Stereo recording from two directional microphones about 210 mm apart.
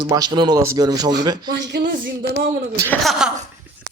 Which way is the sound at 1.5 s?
55° right (ahead or behind).